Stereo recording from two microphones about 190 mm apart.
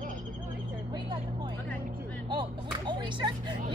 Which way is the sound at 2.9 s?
25° right (ahead or behind).